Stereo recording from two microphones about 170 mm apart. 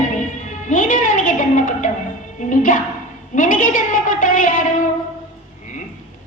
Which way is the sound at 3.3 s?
50° left (ahead or behind).